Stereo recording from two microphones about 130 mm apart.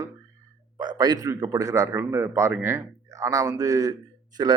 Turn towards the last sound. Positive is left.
turn(degrees=-30)  # may be behind; listen again after turning